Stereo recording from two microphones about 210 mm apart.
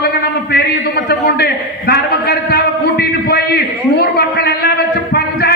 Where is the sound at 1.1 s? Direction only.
50° left (ahead or behind).